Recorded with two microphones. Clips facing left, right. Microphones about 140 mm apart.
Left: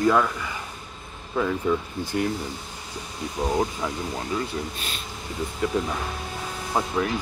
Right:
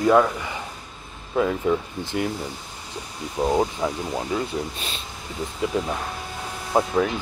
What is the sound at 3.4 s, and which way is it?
Speech, 20° right (ahead or behind).